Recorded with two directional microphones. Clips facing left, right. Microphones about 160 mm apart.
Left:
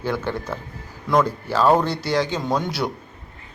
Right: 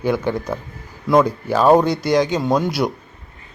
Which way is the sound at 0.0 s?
15° right (ahead or behind).